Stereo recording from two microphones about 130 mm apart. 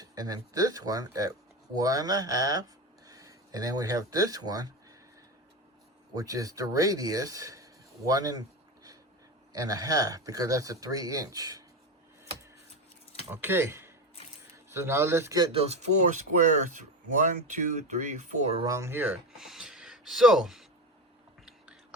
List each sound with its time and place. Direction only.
0.0 s speech: 30° right (ahead or behind)
6.1 s speech: 25° right (ahead or behind)
13.3 s a man's voice: 20° right (ahead or behind)
15.5 s speech: 55° right (ahead or behind)
18.6 s speech: 25° right (ahead or behind); by 20.7 s centre (ahead or behind)